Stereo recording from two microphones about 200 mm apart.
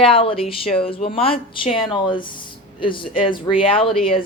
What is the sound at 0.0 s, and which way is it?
Speech, 25° left (ahead or behind).